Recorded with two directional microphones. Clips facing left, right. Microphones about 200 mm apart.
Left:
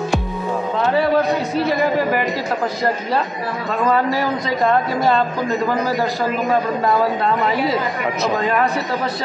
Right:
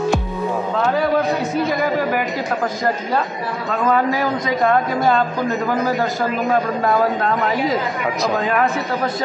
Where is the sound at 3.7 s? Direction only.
Centre (ahead or behind).